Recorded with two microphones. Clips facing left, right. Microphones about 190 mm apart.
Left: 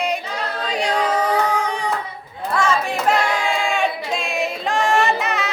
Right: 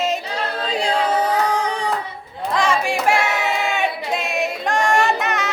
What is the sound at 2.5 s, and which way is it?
Child singing, 15° right (ahead or behind).